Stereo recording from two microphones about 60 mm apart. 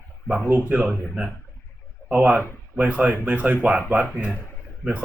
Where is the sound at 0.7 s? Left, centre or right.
Right.